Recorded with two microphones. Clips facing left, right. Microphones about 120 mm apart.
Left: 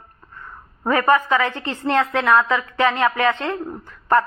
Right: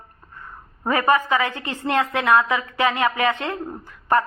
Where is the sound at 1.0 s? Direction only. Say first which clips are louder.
Left 2 dB; 15° right (ahead or behind).